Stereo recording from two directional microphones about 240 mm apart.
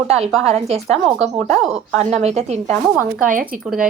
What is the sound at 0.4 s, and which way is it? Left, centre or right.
A woman's voice, right.